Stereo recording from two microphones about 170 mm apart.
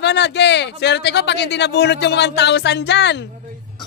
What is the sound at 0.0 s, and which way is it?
Speech, 90° left.